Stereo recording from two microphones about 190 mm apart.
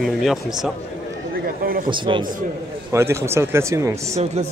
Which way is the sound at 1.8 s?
25° right (ahead or behind).